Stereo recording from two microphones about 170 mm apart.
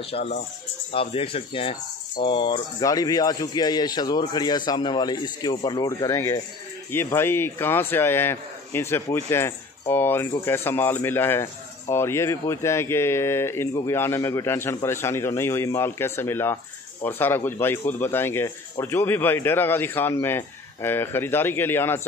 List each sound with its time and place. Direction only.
0.0 s speech: 35° left (ahead or behind); by 22.0 s 15° left (ahead or behind)